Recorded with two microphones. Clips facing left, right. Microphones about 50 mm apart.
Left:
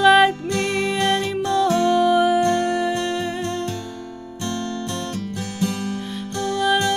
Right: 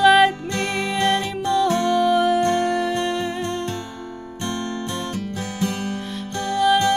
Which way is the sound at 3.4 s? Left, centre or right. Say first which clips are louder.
Even; centre.